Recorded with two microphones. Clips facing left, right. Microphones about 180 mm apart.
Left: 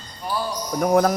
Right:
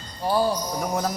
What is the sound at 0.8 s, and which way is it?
Speech, 65° left (ahead or behind).